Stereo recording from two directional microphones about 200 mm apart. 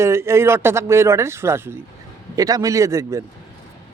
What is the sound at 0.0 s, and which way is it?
Speech, 15° right (ahead or behind).